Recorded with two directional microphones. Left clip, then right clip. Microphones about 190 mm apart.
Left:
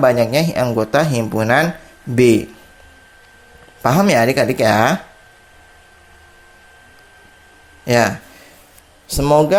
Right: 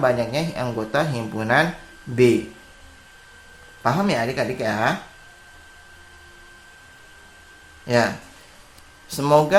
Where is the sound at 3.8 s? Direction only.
40° left (ahead or behind).